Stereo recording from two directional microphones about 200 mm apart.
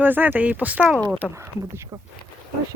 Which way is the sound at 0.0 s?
10° right (ahead or behind).